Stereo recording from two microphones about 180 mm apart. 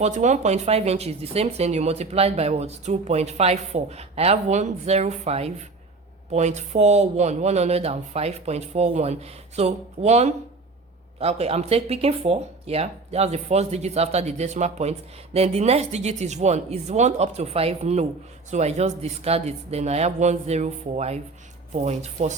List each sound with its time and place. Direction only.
0.0 s speech: 40° right (ahead or behind)